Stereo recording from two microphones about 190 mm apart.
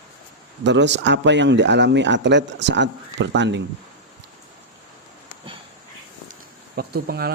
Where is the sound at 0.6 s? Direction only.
70° right (ahead or behind).